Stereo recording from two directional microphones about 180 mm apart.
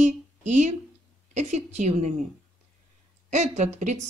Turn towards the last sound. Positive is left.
turn(degrees=-40)  # may be behind; listen again after turning